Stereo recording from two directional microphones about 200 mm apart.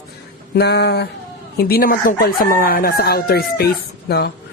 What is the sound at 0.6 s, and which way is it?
Chicken, 55° left (ahead or behind).